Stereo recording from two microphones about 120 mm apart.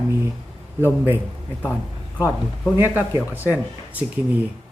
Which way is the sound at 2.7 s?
15° right (ahead or behind).